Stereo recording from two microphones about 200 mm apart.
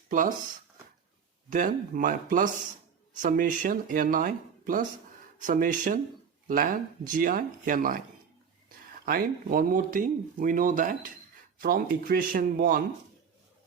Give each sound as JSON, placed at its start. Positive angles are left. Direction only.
{"t": 0.1, "sound": "speech", "side_deg": -40}
{"t": 1.5, "sound": "speech", "side_deg": -40}
{"t": 9.0, "sound": "speech", "side_deg": -45}